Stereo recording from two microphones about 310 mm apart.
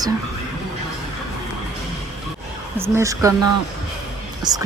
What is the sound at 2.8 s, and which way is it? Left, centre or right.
Speech, centre.